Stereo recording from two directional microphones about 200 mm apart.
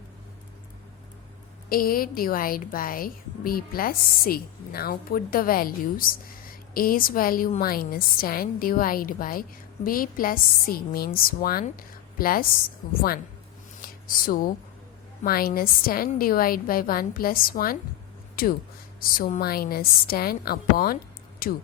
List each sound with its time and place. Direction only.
1.7 s a woman's voice: 45° left (ahead or behind)